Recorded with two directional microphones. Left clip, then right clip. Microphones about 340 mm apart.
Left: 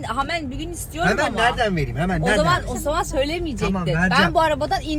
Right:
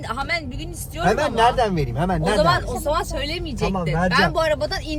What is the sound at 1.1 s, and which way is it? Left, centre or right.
Speech, centre.